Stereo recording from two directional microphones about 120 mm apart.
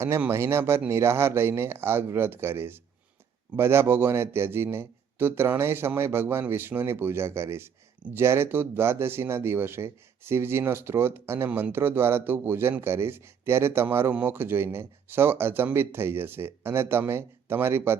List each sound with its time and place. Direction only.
0.2 s speech: 20° right (ahead or behind)